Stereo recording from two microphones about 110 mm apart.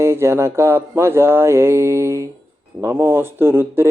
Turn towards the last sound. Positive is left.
turn(degrees=-20)  # may be behind; listen again after turning